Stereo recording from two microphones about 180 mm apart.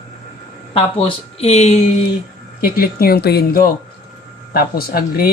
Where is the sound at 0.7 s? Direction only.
30° left (ahead or behind).